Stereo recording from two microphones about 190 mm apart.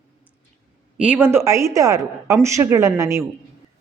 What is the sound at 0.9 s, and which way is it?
Speech, 5° right (ahead or behind).